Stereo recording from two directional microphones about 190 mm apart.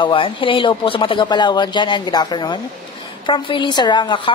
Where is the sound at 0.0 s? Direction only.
25° left (ahead or behind).